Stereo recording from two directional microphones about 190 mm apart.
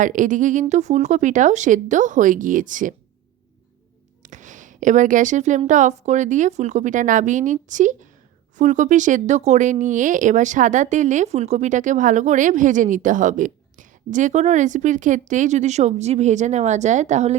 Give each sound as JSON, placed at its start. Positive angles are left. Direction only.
{"t": 0.0, "sound": "speech", "side_deg": -45}
{"t": 4.2, "sound": "speech", "side_deg": -40}